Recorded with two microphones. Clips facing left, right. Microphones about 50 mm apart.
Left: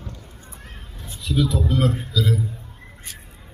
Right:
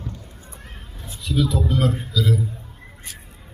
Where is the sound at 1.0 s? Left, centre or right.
Centre.